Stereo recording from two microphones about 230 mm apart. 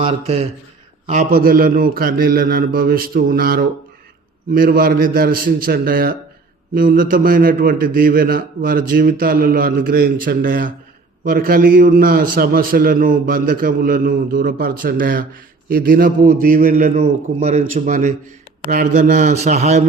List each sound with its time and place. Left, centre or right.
0.0 s a man's voice: right